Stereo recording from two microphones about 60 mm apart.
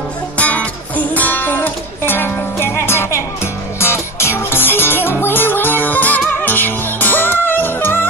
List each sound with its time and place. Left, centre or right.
0.4 s music: left